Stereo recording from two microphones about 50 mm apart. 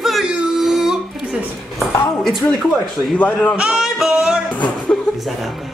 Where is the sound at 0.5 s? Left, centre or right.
Centre.